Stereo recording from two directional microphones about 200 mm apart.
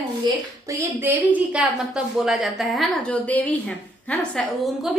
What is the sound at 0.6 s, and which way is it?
A woman's voice, 10° right (ahead or behind).